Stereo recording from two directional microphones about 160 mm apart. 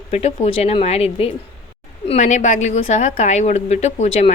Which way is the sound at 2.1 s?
50° left (ahead or behind).